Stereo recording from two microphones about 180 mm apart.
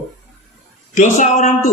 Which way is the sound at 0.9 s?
45° left (ahead or behind).